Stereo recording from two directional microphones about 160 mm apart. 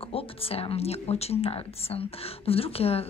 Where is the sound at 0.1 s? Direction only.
35° left (ahead or behind).